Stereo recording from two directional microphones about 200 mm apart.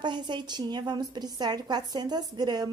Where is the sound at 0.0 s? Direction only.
25° right (ahead or behind).